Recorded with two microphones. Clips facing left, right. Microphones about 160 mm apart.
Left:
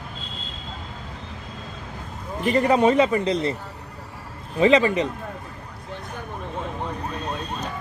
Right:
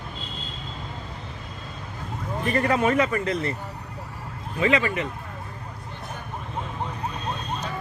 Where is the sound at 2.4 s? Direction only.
20° left (ahead or behind).